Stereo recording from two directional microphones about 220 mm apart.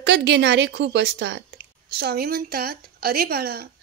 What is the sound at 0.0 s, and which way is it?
Speech, 50° right (ahead or behind).